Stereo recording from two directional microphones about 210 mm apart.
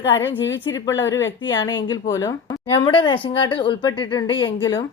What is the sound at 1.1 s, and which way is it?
Speech, 15° left (ahead or behind).